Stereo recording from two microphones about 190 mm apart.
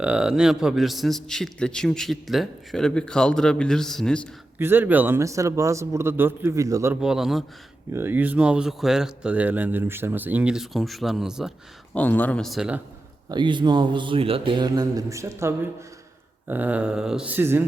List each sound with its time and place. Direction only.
0.0 s a man's voice: 5° right (ahead or behind)
4.5 s a man's voice: 10° right (ahead or behind)
11.9 s a man's voice: 10° left (ahead or behind)
13.3 s a man's voice: 25° right (ahead or behind)